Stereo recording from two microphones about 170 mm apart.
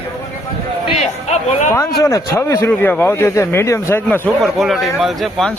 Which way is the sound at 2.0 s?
15° left (ahead or behind).